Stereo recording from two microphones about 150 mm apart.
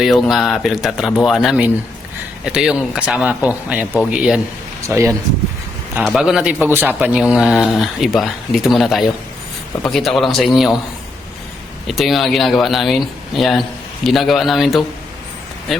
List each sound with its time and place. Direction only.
0.0 s speech: centre (ahead or behind)
4.8 s speech: 20° right (ahead or behind)
6.1 s speech: 5° right (ahead or behind)
11.9 s speech: centre (ahead or behind)